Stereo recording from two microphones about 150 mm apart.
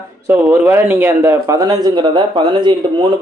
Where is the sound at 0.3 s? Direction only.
15° right (ahead or behind).